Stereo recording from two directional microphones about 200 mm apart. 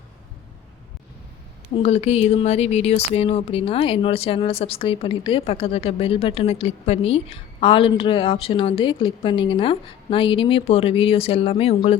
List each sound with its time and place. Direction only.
1.7 s speech: 30° left (ahead or behind)